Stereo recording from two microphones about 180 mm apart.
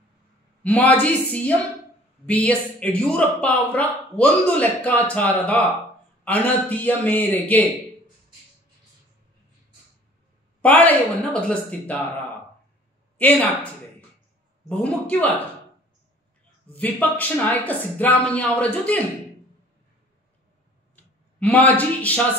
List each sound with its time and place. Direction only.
0.7 s speech: 10° left (ahead or behind)
10.6 s speech: 10° left (ahead or behind)
13.2 s speech: 10° left (ahead or behind)
14.7 s speech: 5° left (ahead or behind)
16.7 s speech: 10° left (ahead or behind)
20.9 s a sound: 10° left (ahead or behind)